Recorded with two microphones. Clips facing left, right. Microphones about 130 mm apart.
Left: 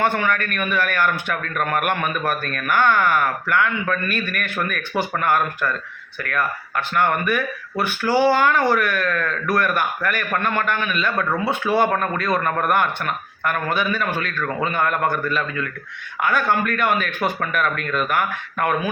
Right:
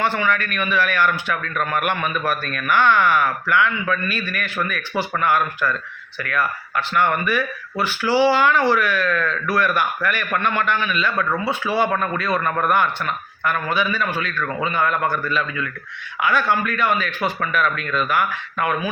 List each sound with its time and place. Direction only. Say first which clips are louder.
0.0 s a man's voice: even; 50° left (ahead or behind)